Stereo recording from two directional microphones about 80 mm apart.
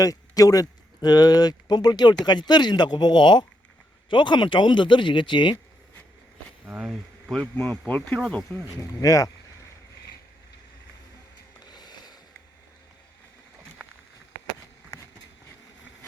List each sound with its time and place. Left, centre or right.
0.0 s speech: left
6.8 s speech: centre
7.9 s speech: left
8.7 s speech: left
11.6 s a sound: left